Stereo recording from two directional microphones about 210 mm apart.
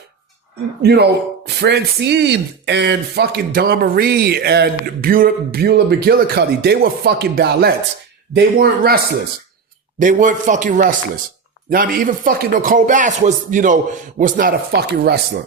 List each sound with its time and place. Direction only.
0.8 s speech: 50° right (ahead or behind)
10.0 s speech: 40° right (ahead or behind)